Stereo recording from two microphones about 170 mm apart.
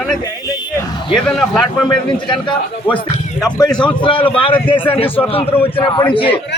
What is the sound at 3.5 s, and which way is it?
A man's voice, 25° left (ahead or behind).